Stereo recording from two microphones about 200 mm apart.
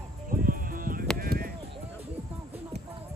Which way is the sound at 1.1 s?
50° right (ahead or behind).